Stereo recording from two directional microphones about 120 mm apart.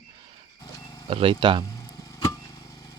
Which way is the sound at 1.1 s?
50° right (ahead or behind).